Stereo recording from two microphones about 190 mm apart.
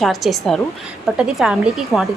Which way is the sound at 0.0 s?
Centre (ahead or behind).